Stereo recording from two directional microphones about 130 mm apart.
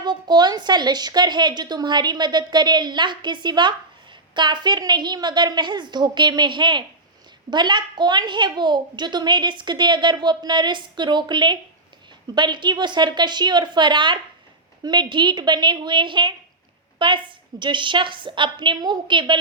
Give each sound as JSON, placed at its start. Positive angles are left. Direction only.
{"t": 0.0, "sound": "a woman's voice", "side_deg": -35}